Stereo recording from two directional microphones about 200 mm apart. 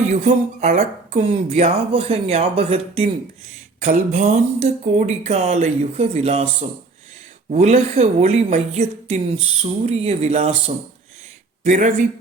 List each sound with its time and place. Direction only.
0.1 s speech: 35° right (ahead or behind)
11.6 s speech: 40° right (ahead or behind)